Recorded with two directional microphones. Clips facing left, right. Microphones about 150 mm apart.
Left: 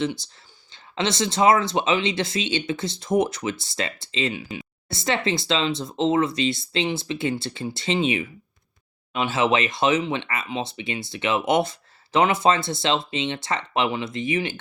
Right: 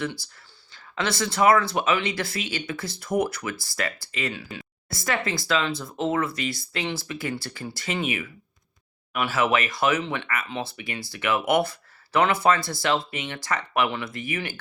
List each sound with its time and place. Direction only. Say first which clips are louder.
0.0 s speech: left 5 dB; 20° left (ahead or behind)